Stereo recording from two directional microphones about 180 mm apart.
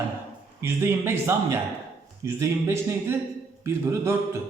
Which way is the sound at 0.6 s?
15° right (ahead or behind).